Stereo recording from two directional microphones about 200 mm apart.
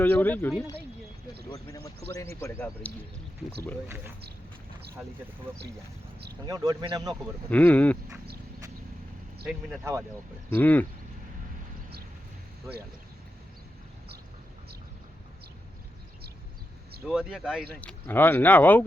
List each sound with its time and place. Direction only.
0.0 s speech: 10° left (ahead or behind)
3.8 s speech: 10° right (ahead or behind)
6.4 s speech: 20° right (ahead or behind)
7.1 s speech: 10° left (ahead or behind)
10.6 s speech: 10° left (ahead or behind)
17.1 s speech: 5° right (ahead or behind)
17.7 s speech: 10° left (ahead or behind)